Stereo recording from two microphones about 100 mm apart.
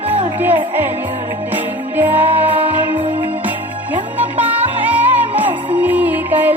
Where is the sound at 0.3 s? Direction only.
20° right (ahead or behind).